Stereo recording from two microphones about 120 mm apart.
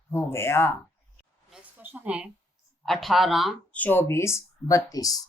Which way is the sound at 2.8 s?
Centre (ahead or behind).